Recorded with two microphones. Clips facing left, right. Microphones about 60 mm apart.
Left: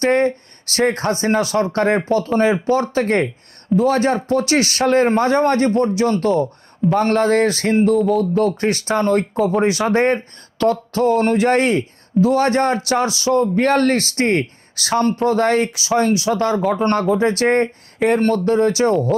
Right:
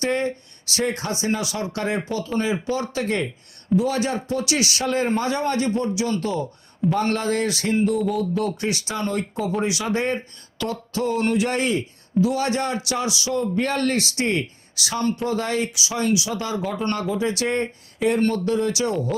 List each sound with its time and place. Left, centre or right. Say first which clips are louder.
0.0 s a man's voice: left 7 dB; left